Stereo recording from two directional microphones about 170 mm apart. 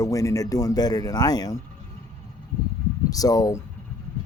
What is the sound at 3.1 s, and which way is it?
Speech, 20° left (ahead or behind).